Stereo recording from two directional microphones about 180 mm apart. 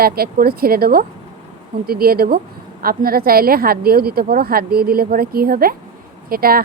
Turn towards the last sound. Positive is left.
turn(degrees=-55)  # may be behind; listen again after turning